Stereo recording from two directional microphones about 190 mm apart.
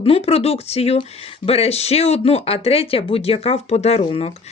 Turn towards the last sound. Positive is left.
turn(degrees=35)  # may be behind; listen again after turning